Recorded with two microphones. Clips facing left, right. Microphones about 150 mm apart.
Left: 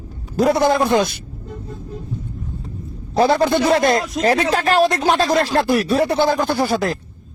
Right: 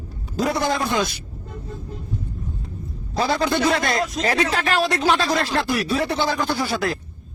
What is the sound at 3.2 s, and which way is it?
Speech, 55° left (ahead or behind).